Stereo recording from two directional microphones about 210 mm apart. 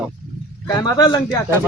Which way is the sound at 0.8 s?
15° left (ahead or behind).